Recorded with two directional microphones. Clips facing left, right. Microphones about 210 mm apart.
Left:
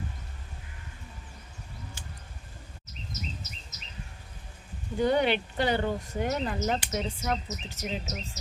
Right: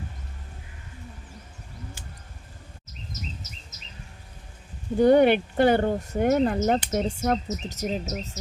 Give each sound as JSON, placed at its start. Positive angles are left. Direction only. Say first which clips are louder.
{"t": 4.9, "sound": "speech", "louder": "right 8 dB", "side_deg": -50}